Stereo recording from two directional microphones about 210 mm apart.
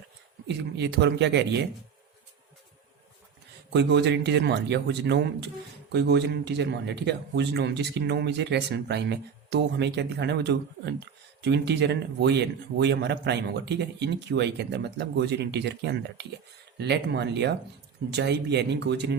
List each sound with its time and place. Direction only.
0.4 s speech: 55° right (ahead or behind)
3.7 s speech: 55° right (ahead or behind)